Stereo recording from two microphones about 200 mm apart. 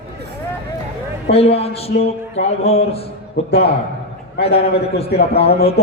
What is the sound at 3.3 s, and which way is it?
Speech, 55° left (ahead or behind).